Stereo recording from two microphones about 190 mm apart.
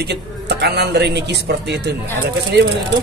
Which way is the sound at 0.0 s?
60° right (ahead or behind).